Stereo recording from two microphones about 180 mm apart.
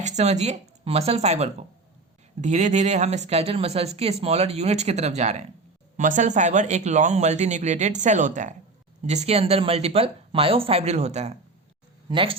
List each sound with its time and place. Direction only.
0.0 s speech: 40° right (ahead or behind)